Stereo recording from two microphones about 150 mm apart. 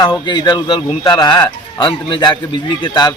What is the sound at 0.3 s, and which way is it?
Speech, 30° left (ahead or behind).